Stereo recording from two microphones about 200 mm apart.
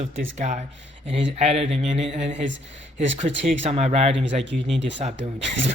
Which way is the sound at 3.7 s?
30° right (ahead or behind).